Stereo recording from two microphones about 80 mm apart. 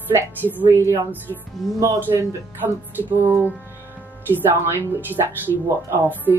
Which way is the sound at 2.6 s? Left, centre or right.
Right.